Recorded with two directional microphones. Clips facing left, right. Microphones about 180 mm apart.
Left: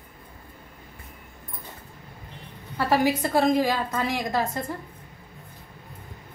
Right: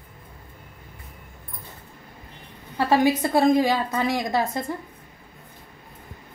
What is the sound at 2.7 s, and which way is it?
A woman's voice, 20° right (ahead or behind).